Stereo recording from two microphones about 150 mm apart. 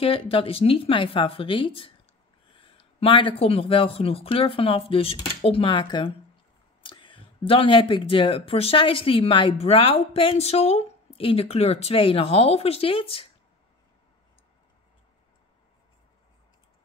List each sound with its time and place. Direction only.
0.0 s speech: 40° left (ahead or behind)